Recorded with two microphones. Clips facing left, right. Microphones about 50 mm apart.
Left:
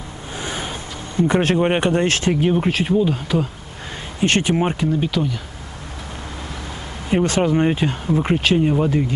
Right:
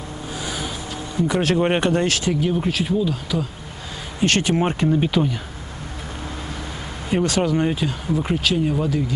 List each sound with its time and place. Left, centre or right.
0.4 s music: left
1.2 s speech: left
1.8 s speech: left
2.0 s speech: left
4.6 s speech: centre
5.0 s speech: centre
7.2 s speech: left